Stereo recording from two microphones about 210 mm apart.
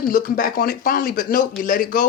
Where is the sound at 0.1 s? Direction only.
45° left (ahead or behind).